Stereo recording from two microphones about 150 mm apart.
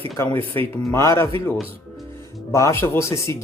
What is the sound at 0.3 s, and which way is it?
Speech, 15° left (ahead or behind).